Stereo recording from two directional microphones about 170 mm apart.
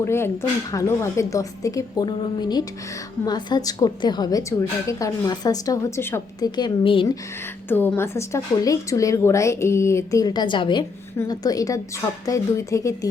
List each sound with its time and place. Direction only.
0.0 s a woman's voice: 15° left (ahead or behind); by 7.1 s 30° left (ahead or behind)
7.7 s a woman's voice: 15° left (ahead or behind)